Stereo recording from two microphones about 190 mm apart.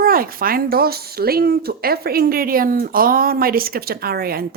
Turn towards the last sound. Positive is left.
turn(degrees=-55)  # may be behind; listen again after turning